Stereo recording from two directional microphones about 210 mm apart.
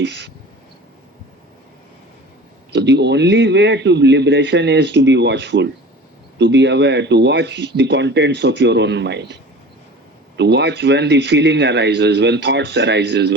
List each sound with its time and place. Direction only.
0.0 s speech: 55° right (ahead or behind)
2.7 s speech: 55° right (ahead or behind)